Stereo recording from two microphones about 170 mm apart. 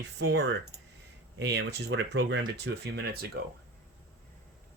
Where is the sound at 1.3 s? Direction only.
90° right; by 3.5 s 70° right (ahead or behind).